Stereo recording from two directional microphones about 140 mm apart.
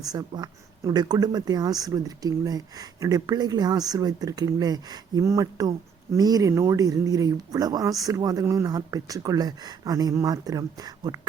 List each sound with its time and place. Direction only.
0.0 s speech: 30° right (ahead or behind)